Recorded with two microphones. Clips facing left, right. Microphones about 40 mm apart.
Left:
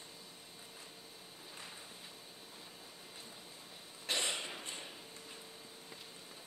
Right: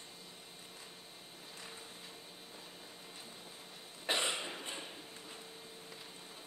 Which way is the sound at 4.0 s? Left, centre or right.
Centre.